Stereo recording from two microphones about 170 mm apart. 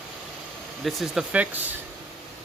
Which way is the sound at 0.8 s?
Centre (ahead or behind).